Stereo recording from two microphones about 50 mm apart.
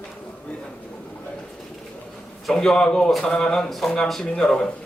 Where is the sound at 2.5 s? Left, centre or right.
Centre.